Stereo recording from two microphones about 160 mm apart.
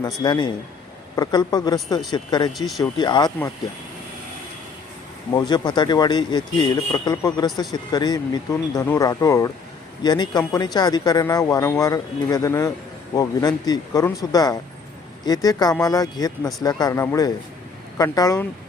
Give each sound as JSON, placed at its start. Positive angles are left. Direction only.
{"t": 0.0, "sound": "speech", "side_deg": 25}
{"t": 2.5, "sound": "speech", "side_deg": 0}
{"t": 3.0, "sound": "speech", "side_deg": 25}
{"t": 5.3, "sound": "speech", "side_deg": 25}